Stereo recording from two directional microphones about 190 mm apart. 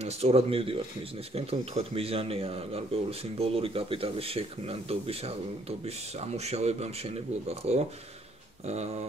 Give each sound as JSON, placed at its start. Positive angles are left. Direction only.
{"t": 0.0, "sound": "speech", "side_deg": -35}